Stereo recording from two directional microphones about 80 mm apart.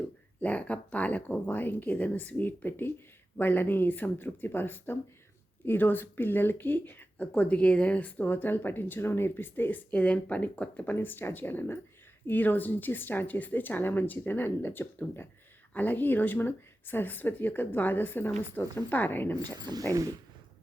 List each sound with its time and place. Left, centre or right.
0.3 s speech: centre
19.4 s speech: right
19.9 s speech: right